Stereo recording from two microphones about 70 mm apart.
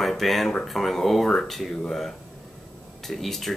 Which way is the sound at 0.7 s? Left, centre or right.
Centre.